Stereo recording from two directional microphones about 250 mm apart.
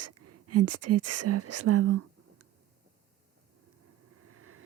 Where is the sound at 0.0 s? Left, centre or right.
Right.